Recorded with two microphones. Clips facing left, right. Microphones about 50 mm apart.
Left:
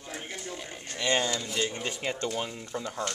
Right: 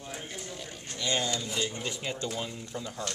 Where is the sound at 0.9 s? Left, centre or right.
Left.